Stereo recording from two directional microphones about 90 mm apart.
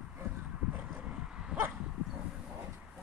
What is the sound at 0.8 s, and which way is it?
Vehicle, 10° right (ahead or behind).